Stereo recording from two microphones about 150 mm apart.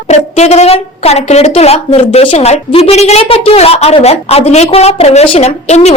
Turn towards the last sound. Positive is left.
turn(degrees=45)  # may be behind; listen again after turning